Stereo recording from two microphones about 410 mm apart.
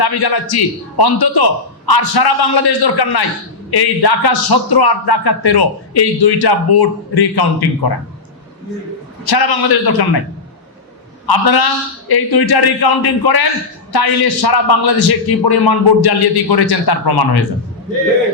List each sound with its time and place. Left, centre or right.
0.0 s speech: left
9.3 s speech: left
11.3 s speech: left